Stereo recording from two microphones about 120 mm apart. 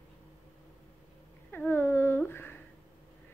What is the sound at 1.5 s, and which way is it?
Speech, 20° left (ahead or behind).